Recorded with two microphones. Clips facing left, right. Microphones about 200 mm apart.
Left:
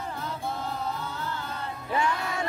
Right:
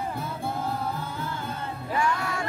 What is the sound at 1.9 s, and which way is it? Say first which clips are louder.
Music: right 1 dB; 20° left (ahead or behind).